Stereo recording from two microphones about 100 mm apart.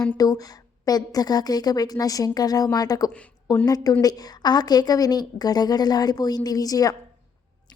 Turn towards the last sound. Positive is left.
turn(degrees=35)  # may be behind; listen again after turning